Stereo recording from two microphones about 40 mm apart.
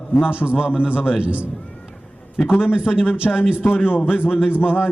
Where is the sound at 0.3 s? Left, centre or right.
Right.